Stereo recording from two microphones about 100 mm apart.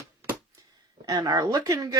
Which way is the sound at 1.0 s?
40° right (ahead or behind).